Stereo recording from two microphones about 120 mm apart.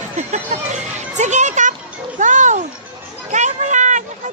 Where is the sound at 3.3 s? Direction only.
85° right.